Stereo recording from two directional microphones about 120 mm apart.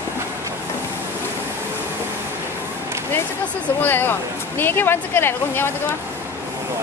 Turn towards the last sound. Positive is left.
turn(degrees=20)  # may be behind; listen again after turning